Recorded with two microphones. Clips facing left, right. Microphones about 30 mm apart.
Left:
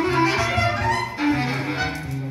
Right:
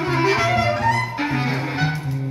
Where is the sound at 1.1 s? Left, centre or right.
Centre.